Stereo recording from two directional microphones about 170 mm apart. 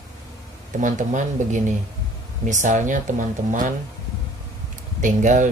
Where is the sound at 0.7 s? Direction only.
50° right (ahead or behind).